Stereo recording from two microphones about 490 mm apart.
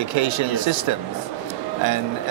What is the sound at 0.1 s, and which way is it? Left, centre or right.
Speech, right.